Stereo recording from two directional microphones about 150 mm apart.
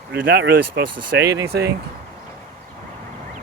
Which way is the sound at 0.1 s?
90° right.